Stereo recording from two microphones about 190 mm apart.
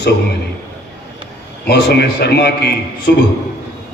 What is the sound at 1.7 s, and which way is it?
A man's voice, 60° left (ahead or behind).